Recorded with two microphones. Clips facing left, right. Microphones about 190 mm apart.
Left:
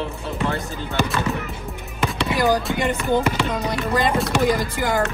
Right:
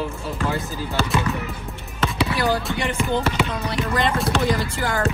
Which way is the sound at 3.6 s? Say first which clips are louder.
Left 2 dB; 15° left (ahead or behind).